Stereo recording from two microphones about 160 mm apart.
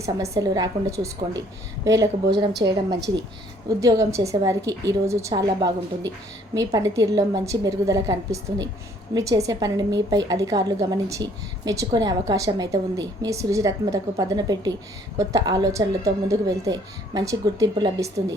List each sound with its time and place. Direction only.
0.0 s a woman's voice: 20° right (ahead or behind)
2.5 s a woman's voice: 90° right
3.7 s a woman's voice: 20° right (ahead or behind)